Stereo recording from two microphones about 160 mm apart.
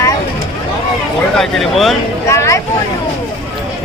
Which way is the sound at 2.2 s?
20° left (ahead or behind).